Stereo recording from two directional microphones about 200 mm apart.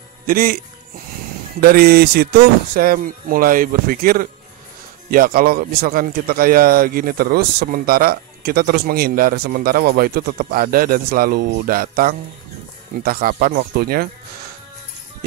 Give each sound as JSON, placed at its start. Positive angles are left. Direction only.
{"t": 0.3, "sound": "a man's voice", "side_deg": -45}
{"t": 1.6, "sound": "a man's voice", "side_deg": -50}